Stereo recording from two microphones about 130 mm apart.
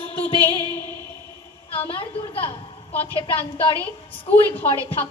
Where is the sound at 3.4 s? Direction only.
50° left (ahead or behind).